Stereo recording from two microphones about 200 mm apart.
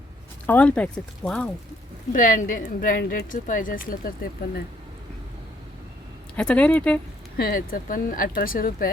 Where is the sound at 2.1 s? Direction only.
40° left (ahead or behind).